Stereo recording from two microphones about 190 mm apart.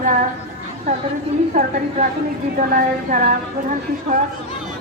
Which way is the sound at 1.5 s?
45° right (ahead or behind).